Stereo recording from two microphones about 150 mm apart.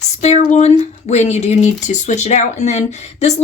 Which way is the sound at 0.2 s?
50° left (ahead or behind).